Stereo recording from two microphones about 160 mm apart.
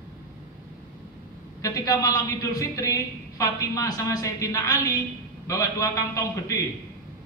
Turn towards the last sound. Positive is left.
turn(degrees=20)  # may be behind; listen again after turning